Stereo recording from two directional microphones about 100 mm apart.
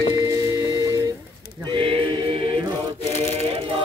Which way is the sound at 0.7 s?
35° right (ahead or behind).